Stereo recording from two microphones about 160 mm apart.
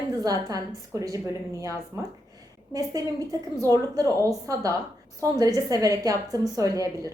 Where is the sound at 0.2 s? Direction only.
25° right (ahead or behind).